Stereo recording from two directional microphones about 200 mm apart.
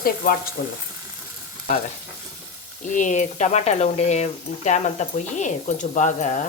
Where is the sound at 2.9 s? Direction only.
40° left (ahead or behind).